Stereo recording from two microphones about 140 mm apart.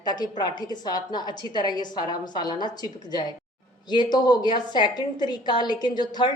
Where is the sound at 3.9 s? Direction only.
30° left (ahead or behind).